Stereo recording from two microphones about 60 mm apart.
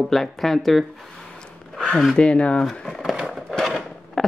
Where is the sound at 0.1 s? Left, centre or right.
Centre.